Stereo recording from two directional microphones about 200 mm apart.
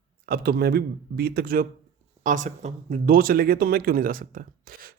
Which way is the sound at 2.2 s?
40° right (ahead or behind).